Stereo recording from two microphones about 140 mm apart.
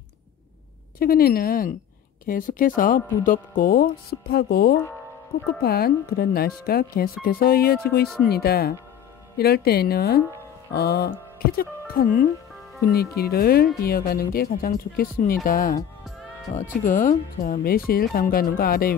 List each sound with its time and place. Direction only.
0.9 s speech: 90° left
2.2 s speech: 80° left
16.5 s speech: 30° left (ahead or behind)
16.8 s speech: 75° left (ahead or behind)